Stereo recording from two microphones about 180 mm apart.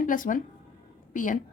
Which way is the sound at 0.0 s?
45° left (ahead or behind).